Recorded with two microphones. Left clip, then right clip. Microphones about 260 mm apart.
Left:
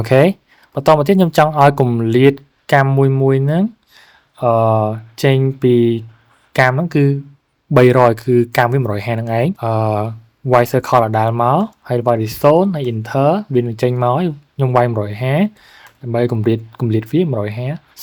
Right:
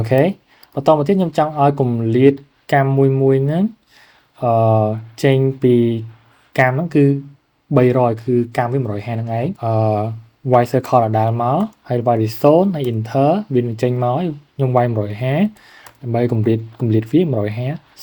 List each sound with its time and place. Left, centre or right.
0.0 s speech: left